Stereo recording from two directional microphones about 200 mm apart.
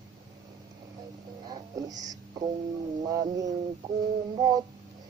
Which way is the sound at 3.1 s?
15° right (ahead or behind).